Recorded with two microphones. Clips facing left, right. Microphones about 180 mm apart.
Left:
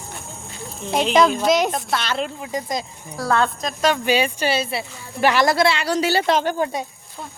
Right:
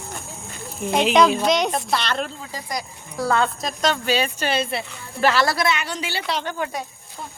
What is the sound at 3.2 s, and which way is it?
Speech, centre (ahead or behind).